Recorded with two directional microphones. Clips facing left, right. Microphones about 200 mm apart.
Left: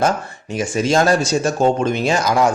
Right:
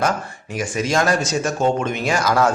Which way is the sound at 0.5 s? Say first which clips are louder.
Left 4 dB; 25° left (ahead or behind).